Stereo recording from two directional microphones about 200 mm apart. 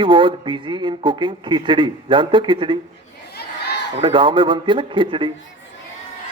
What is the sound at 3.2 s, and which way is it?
Crowd, 55° left (ahead or behind).